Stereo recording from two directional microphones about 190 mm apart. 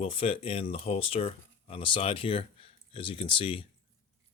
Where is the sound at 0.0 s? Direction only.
30° left (ahead or behind).